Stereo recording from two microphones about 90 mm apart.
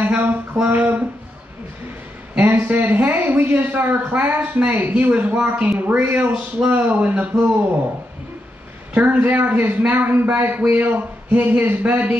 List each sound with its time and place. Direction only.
0.0 s a man's voice: 20° right (ahead or behind)
2.3 s a man's voice: 15° right (ahead or behind)
8.9 s a man's voice: 20° right (ahead or behind)